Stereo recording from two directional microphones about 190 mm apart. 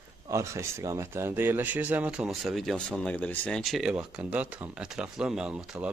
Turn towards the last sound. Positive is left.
turn(degrees=-5)  # may be behind; listen again after turning